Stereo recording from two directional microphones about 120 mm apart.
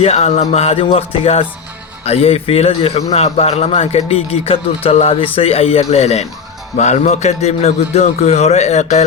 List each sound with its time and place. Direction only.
0.0 s speech: 60° left (ahead or behind)
6.7 s a man's voice: 75° left (ahead or behind)